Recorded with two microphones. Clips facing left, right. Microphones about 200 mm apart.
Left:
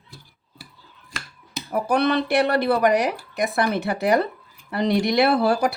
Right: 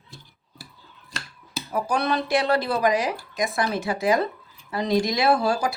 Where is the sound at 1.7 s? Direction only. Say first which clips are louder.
Left 4 dB; 60° left (ahead or behind).